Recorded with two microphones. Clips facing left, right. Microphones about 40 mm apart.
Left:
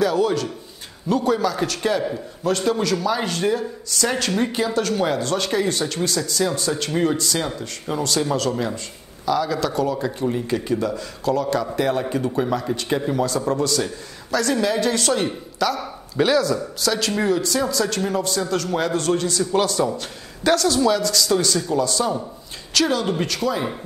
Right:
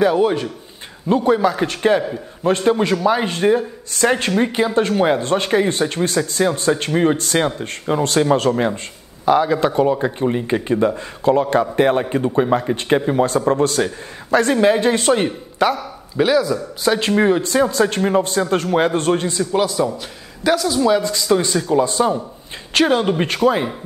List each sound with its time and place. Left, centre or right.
0.0 s speech: right
16.2 s speech: centre
16.8 s speech: right
19.5 s speech: centre; by 23.7 s right